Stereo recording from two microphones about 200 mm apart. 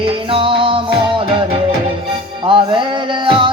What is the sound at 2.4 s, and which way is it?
Music, 25° right (ahead or behind).